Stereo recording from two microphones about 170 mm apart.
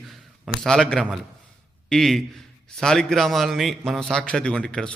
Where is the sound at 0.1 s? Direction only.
Centre (ahead or behind).